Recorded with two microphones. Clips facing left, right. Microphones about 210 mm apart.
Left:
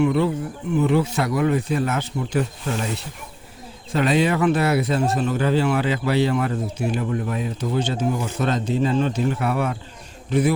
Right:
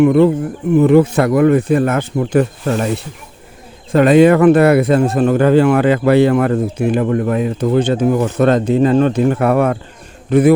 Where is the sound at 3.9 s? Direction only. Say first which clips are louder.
Right 11 dB; 55° right (ahead or behind).